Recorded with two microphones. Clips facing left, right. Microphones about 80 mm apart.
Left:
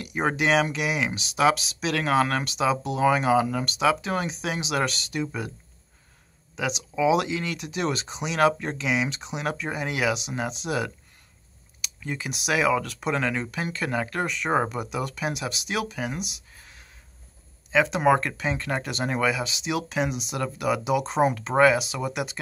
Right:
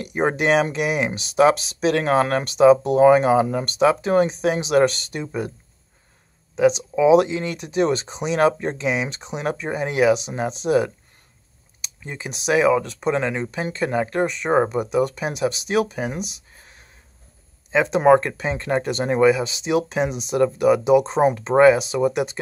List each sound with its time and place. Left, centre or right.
0.0 s speech: right
6.5 s speech: right